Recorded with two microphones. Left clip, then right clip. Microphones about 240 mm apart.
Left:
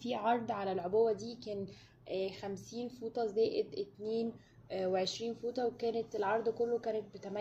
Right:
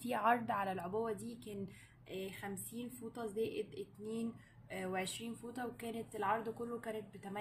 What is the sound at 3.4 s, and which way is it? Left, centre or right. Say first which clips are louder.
Speech: left 7 dB; centre.